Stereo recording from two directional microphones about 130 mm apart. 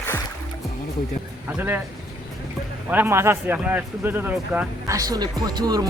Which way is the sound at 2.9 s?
15° right (ahead or behind).